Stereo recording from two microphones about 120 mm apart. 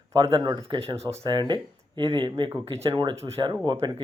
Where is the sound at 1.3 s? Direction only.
40° right (ahead or behind).